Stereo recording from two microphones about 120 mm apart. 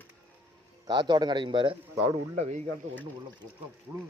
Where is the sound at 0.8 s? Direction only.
35° right (ahead or behind).